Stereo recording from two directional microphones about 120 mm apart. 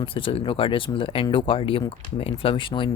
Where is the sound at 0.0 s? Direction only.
45° left (ahead or behind).